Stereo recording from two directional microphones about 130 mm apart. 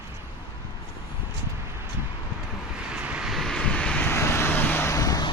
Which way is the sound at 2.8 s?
10° right (ahead or behind).